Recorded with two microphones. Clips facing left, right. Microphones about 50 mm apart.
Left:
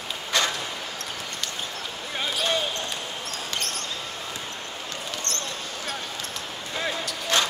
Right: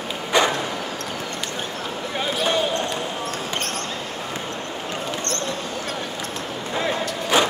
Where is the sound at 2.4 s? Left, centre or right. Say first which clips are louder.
Right 6 dB; right.